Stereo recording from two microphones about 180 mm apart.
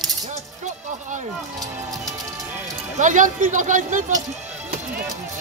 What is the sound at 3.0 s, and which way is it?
Speech, 45° right (ahead or behind).